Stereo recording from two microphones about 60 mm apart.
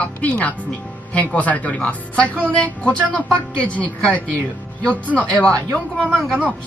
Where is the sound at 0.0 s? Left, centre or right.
Left.